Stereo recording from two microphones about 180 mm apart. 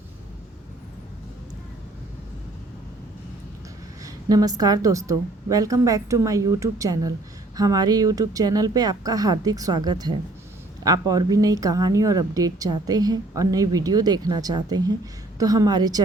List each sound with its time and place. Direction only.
4.0 s speech: 20° right (ahead or behind)